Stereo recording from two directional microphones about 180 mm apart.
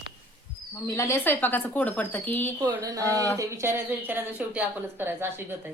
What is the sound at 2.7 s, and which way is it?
Speech, 20° right (ahead or behind).